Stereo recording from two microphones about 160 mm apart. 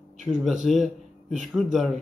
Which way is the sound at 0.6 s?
Centre (ahead or behind).